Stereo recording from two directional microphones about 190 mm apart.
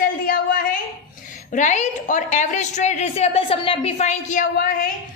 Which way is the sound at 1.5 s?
40° left (ahead or behind).